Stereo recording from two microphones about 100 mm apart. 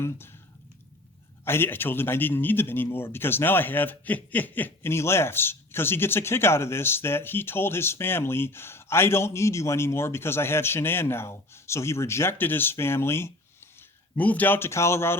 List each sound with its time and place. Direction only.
1.5 s speech: 20° left (ahead or behind)